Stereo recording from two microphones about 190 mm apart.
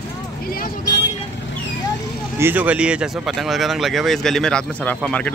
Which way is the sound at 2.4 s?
10° right (ahead or behind).